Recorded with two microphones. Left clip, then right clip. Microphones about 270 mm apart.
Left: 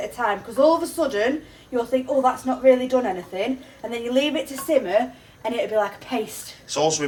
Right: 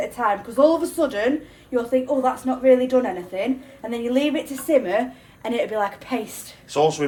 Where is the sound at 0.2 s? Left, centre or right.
Centre.